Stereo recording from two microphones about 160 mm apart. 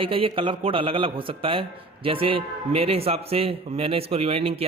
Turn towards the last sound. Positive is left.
turn(degrees=-40)  # may be behind; listen again after turning